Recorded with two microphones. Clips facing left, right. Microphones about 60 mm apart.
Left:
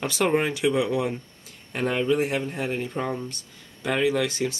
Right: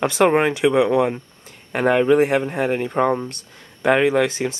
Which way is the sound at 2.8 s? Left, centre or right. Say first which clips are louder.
Right 10 dB; right.